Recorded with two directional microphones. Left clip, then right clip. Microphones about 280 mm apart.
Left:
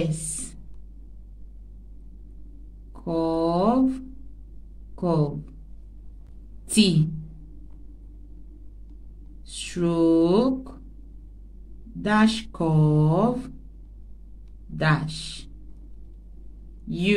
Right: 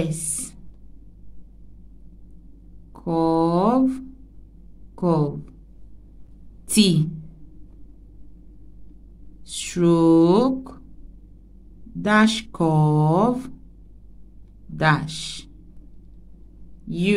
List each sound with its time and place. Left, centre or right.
0.0 s a sound: centre
2.9 s mantra: right
4.9 s a sound: right
6.7 s a woman's voice: right
9.5 s speech: right
12.0 s speech: right
14.8 s speech: right
16.8 s speech: centre